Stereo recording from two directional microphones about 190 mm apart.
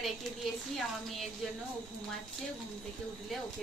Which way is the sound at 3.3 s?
Centre (ahead or behind).